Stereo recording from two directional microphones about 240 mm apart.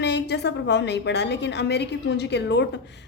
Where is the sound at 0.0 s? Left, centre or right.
Left.